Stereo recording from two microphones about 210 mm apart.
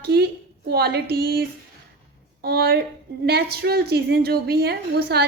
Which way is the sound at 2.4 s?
50° right (ahead or behind).